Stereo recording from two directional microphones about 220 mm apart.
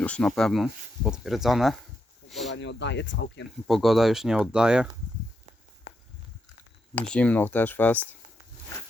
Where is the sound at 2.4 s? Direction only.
55° left (ahead or behind).